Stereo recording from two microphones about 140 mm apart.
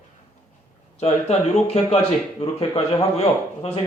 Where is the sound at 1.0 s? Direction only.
50° left (ahead or behind).